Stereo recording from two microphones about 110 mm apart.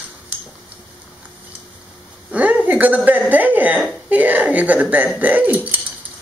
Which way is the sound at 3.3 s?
15° right (ahead or behind).